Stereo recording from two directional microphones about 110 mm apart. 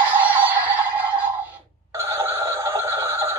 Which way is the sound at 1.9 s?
25° right (ahead or behind).